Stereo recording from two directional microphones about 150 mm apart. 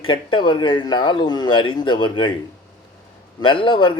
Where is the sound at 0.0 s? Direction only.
35° left (ahead or behind).